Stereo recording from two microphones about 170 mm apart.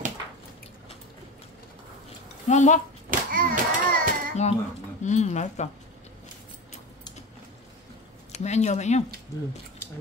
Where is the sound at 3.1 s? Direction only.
50° right (ahead or behind).